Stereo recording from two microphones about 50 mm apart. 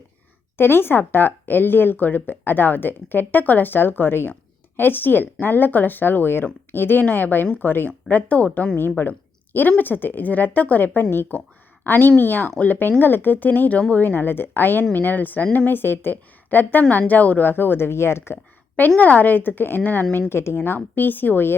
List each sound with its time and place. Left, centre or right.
0.5 s speech: left
8.1 s speech: left
8.7 s speech: left
18.9 s speech: left
20.3 s a woman's voice: left
20.6 s speech: left